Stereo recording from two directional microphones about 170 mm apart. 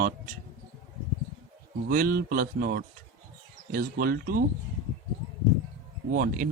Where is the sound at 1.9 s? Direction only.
55° right (ahead or behind).